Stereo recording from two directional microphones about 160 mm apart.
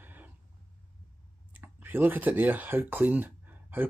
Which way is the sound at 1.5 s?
10° right (ahead or behind).